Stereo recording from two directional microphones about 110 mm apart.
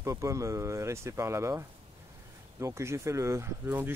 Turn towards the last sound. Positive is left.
turn(degrees=-20)  # may be behind; listen again after turning